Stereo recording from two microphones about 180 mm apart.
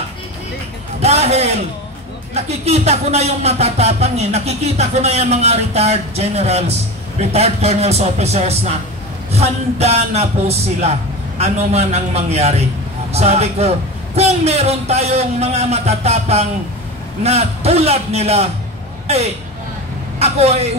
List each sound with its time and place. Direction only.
1.0 s a sound: 35° right (ahead or behind)
2.3 s speech: 35° right (ahead or behind)
20.2 s speech: 35° right (ahead or behind)